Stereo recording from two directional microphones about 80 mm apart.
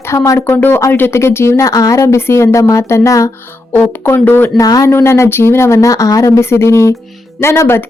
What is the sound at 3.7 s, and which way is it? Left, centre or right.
Speech, left.